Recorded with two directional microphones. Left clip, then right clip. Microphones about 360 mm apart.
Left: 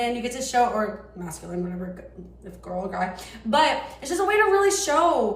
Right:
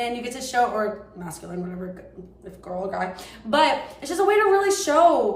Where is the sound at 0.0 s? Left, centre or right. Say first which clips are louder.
Left 1 dB; centre.